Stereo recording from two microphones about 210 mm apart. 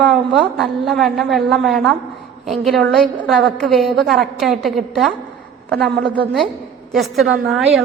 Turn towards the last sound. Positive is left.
turn(degrees=0)  # may be behind; listen again after turning